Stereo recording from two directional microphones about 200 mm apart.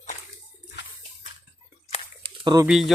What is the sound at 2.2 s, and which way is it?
Bird, 20° right (ahead or behind).